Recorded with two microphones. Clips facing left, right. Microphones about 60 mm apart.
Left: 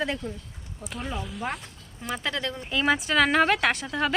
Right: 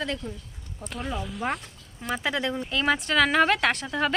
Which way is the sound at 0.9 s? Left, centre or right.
Centre.